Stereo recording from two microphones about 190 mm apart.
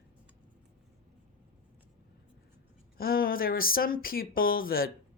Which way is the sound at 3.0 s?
50° left (ahead or behind).